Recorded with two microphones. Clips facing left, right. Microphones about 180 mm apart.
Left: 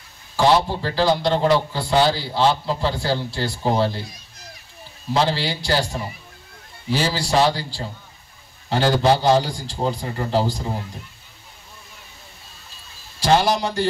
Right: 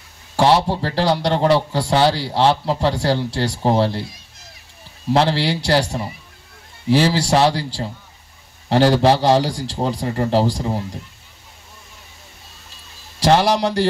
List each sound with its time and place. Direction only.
0.4 s a man's voice: 75° right (ahead or behind)
5.1 s a man's voice: 70° right (ahead or behind)
13.2 s a man's voice: 75° right (ahead or behind)